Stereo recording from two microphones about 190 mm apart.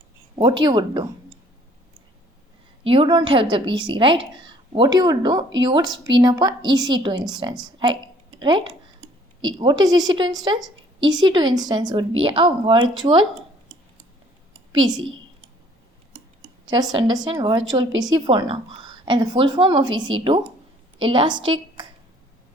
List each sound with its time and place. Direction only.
0.3 s a woman's voice: 25° right (ahead or behind)
2.8 s a woman's voice: 25° right (ahead or behind)
16.6 s a woman's voice: 20° right (ahead or behind)